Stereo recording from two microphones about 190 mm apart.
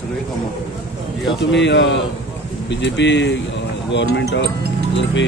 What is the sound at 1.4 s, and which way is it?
Speech, 70° left (ahead or behind).